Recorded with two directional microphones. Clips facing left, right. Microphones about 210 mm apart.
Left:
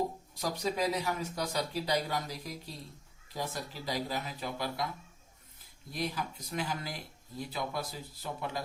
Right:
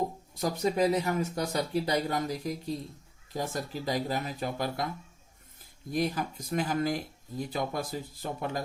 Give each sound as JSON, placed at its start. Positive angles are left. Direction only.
{"t": 0.3, "sound": "speech", "side_deg": -50}
{"t": 5.9, "sound": "speech", "side_deg": -50}